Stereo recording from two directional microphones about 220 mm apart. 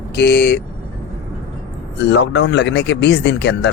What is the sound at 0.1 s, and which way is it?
Speech, 50° left (ahead or behind).